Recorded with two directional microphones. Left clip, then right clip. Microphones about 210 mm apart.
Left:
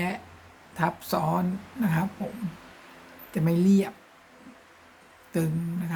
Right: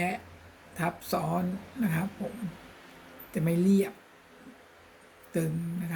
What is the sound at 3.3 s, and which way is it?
Speech, 25° left (ahead or behind).